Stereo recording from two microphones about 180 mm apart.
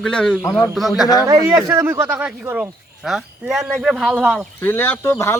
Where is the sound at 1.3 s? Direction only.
15° right (ahead or behind).